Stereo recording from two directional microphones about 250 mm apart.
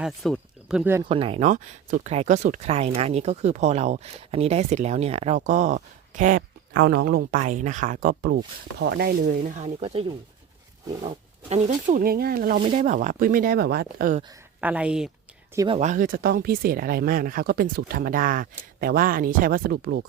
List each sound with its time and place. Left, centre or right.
0.0 s speech: centre
1.0 s speech: right
14.6 s speech: centre
15.5 s speech: right